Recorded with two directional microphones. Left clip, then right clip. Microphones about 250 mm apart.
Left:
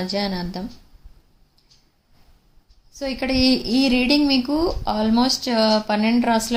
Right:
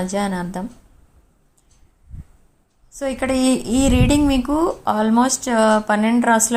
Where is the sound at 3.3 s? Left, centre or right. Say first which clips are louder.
Left 2 dB; right.